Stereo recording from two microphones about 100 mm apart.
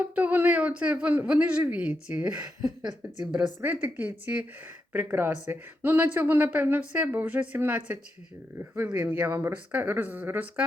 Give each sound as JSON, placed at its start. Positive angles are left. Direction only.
{"t": 0.2, "sound": "a woman's voice", "side_deg": -15}